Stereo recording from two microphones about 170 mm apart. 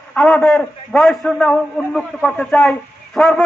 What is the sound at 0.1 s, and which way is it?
A man's voice, 5° left (ahead or behind).